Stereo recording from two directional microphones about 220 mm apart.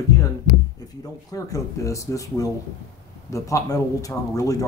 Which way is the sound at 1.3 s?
15° left (ahead or behind).